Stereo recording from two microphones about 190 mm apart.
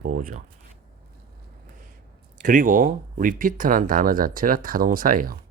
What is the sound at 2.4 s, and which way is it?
Speech, 45° right (ahead or behind).